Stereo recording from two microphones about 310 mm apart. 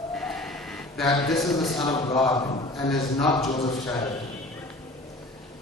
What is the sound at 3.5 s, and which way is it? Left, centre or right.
Speech, centre.